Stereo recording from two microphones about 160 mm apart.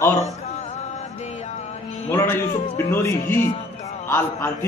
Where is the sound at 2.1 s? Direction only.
15° left (ahead or behind).